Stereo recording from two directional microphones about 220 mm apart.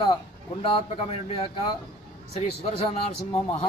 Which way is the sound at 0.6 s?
25° left (ahead or behind).